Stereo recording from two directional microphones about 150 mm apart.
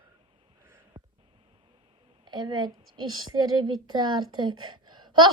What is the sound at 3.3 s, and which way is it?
A woman's voice, 30° right (ahead or behind).